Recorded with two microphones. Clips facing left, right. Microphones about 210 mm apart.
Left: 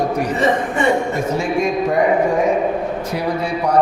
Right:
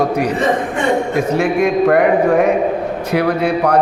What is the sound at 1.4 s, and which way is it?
A man's voice, 65° right (ahead or behind).